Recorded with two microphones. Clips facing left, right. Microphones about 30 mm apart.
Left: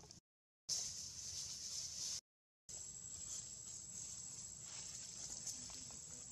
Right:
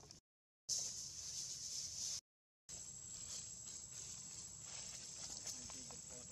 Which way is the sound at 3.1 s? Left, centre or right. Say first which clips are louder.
Right 1 dB; right.